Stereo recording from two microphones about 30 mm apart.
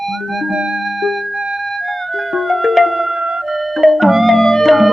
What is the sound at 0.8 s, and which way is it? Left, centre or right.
Music, centre.